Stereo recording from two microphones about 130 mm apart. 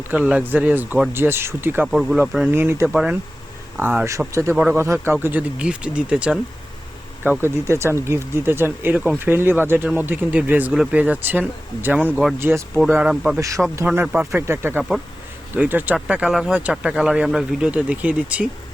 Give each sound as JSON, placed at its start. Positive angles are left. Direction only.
{"t": 0.1, "sound": "speech", "side_deg": -10}
{"t": 1.9, "sound": "speech", "side_deg": 0}
{"t": 2.5, "sound": "speech", "side_deg": -20}
{"t": 2.9, "sound": "speech", "side_deg": -5}
{"t": 3.8, "sound": "speech", "side_deg": -15}
{"t": 4.5, "sound": "speech", "side_deg": -10}
{"t": 12.4, "sound": "speech", "side_deg": -20}
{"t": 12.9, "sound": "speech", "side_deg": -10}